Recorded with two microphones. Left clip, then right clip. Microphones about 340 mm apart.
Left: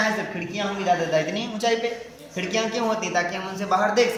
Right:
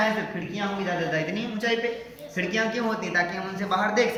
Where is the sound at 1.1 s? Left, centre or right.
Centre.